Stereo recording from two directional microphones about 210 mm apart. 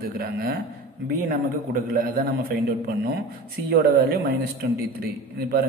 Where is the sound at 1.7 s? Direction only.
40° right (ahead or behind).